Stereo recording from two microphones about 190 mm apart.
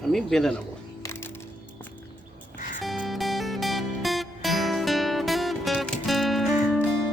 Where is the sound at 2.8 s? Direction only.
Centre (ahead or behind).